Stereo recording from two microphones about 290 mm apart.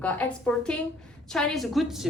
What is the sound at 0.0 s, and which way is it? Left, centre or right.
A woman's voice, centre.